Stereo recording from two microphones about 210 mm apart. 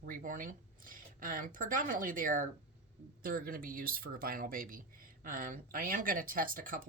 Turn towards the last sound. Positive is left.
turn(degrees=-40)  # may be behind; listen again after turning